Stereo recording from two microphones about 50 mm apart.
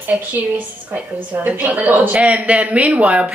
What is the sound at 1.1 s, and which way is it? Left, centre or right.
A woman's voice, right.